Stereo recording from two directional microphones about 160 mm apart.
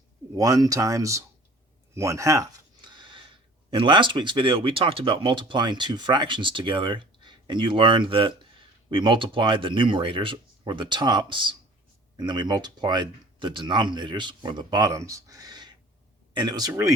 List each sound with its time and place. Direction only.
0.3 s speech: 20° right (ahead or behind)
2.0 s a sound: 20° right (ahead or behind)
3.7 s speech: 35° right (ahead or behind)